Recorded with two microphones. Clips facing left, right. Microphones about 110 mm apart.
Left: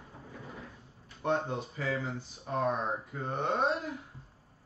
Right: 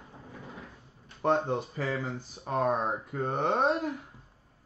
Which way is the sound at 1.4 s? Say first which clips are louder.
Right 4 dB; 50° right (ahead or behind).